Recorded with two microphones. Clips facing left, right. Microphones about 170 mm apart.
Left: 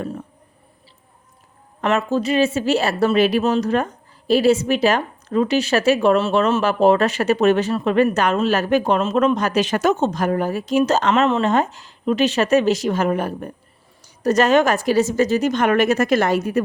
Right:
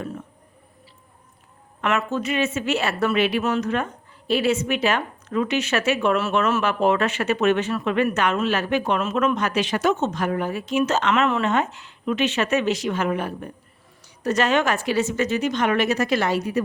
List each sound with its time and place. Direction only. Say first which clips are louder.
1.8 s a woman's voice: left 4 dB; 30° left (ahead or behind); by 16.6 s 50° left (ahead or behind)